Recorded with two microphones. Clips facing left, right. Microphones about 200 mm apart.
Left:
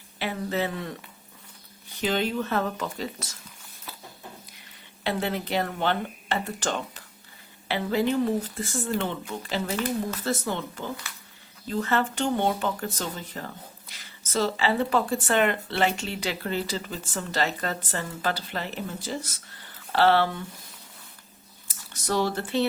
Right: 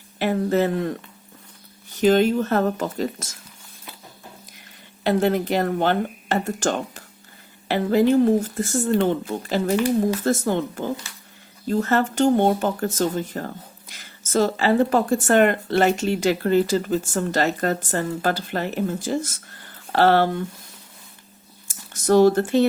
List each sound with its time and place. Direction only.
0.2 s speech: 45° right (ahead or behind)
2.0 s speech: 45° right (ahead or behind)
5.0 s speech: 45° right (ahead or behind)
21.7 s a sound: 45° right (ahead or behind)